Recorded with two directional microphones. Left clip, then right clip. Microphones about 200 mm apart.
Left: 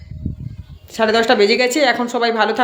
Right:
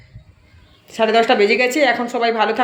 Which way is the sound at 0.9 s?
10° left (ahead or behind).